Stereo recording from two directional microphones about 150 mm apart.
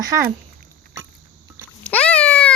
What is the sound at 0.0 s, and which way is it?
Speech, 20° right (ahead or behind).